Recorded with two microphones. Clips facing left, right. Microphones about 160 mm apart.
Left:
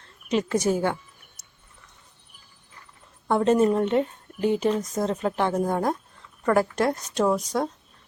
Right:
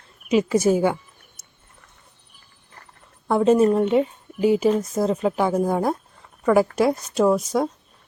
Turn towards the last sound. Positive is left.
turn(degrees=-5)  # may be behind; listen again after turning